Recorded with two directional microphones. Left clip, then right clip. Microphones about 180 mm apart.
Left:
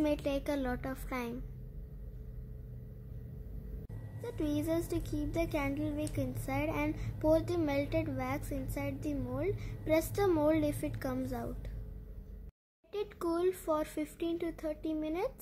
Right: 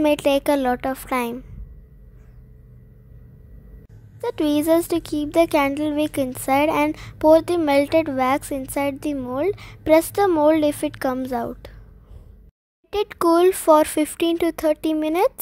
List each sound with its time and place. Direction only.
0.0 s a child's voice: 50° right (ahead or behind)
4.2 s a child's voice: 50° right (ahead or behind)
12.9 s speech: 60° right (ahead or behind)